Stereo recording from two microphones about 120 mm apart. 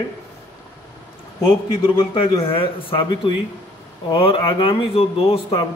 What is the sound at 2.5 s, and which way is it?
Speech, 50° left (ahead or behind).